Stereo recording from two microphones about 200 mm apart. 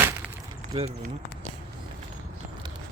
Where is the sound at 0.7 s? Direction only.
30° right (ahead or behind).